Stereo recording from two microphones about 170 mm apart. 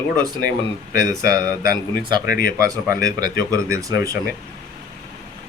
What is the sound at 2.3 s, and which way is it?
Speech, 55° left (ahead or behind).